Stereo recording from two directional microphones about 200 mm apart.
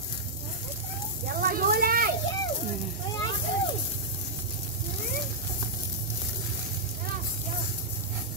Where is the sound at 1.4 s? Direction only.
45° right (ahead or behind).